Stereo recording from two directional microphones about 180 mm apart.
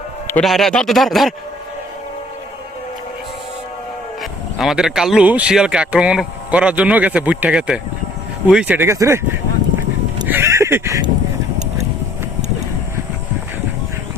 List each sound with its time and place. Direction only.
0.3 s speech: 5° left (ahead or behind)
4.2 s speech: centre (ahead or behind)
10.2 s a sound: 15° right (ahead or behind)